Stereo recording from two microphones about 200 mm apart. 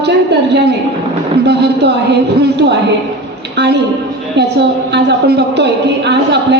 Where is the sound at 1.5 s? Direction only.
55° right (ahead or behind).